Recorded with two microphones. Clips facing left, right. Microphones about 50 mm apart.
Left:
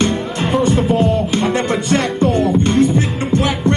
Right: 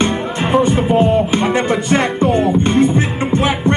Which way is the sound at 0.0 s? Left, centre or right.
Centre.